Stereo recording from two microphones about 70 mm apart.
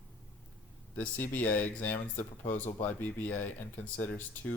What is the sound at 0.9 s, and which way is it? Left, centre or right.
Speech, left.